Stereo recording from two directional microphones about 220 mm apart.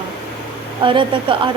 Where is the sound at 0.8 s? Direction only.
25° right (ahead or behind).